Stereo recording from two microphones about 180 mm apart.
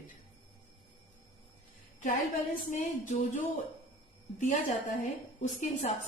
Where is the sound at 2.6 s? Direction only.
45° left (ahead or behind).